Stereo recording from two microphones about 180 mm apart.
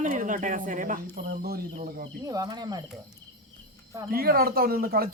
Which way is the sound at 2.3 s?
20° right (ahead or behind).